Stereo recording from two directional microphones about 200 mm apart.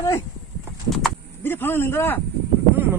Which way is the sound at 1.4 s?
10° left (ahead or behind).